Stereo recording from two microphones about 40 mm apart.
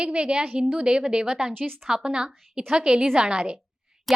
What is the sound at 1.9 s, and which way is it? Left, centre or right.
A woman's voice, centre.